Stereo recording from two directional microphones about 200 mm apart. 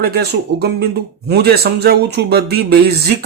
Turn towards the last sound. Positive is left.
turn(degrees=-55)  # may be behind; listen again after turning